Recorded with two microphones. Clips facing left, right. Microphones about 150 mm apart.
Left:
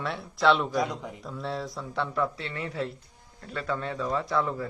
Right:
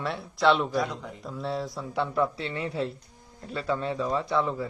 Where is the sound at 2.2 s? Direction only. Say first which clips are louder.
Right 3 dB; 25° right (ahead or behind).